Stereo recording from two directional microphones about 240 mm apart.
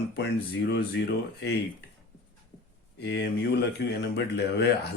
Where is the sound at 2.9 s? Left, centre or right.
Left.